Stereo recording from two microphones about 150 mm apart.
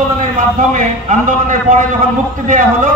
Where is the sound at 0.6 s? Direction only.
60° right (ahead or behind).